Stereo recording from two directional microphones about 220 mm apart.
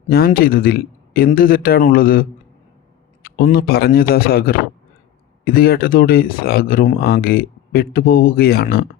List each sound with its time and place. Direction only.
0.1 s speech: 45° left (ahead or behind)
3.2 s speech: 40° left (ahead or behind)